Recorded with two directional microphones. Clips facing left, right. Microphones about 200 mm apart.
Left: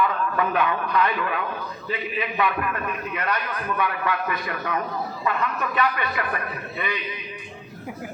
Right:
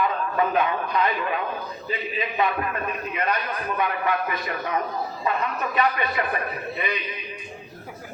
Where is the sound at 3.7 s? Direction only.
20° right (ahead or behind).